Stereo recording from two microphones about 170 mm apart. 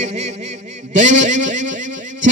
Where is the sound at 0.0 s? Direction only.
40° right (ahead or behind).